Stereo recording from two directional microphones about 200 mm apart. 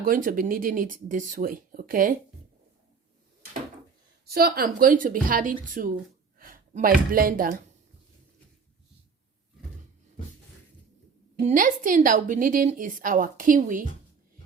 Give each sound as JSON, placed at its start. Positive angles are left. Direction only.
{"t": 0.0, "sound": "speech", "side_deg": -45}
{"t": 4.4, "sound": "speech", "side_deg": -50}
{"t": 11.3, "sound": "a woman's voice", "side_deg": -35}